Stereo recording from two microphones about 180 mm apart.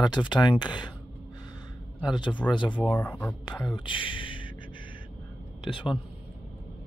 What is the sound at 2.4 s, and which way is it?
Speech, 10° left (ahead or behind).